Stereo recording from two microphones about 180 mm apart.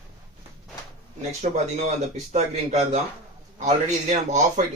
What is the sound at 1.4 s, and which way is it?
Speech, 40° right (ahead or behind).